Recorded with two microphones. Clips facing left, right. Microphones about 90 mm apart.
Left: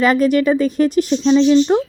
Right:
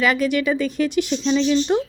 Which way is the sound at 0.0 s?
40° left (ahead or behind).